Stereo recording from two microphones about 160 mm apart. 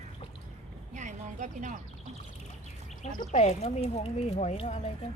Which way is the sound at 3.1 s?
50° left (ahead or behind).